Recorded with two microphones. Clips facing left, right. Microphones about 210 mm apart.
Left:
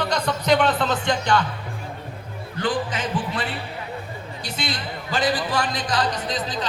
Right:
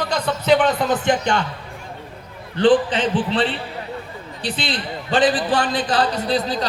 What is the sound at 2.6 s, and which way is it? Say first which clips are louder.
Speech: right 10 dB; 30° right (ahead or behind).